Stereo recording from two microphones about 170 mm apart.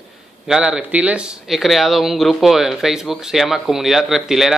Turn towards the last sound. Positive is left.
turn(degrees=0)  # may be behind; listen again after turning